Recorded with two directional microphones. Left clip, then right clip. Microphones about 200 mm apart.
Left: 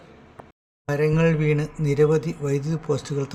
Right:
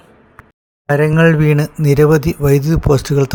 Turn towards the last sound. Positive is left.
turn(degrees=-40)  # may be behind; listen again after turning